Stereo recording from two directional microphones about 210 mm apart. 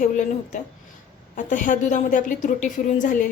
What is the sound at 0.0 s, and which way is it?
A woman's voice, 35° left (ahead or behind).